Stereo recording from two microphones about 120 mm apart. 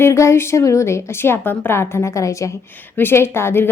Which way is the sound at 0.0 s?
25° left (ahead or behind).